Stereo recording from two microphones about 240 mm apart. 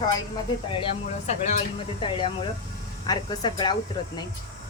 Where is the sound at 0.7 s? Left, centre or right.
Left.